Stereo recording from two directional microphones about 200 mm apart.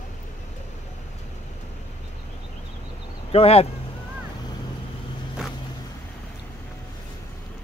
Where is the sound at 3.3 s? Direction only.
30° left (ahead or behind).